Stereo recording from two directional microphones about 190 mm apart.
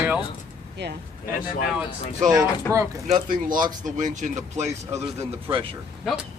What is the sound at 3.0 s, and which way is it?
Speech, 45° right (ahead or behind).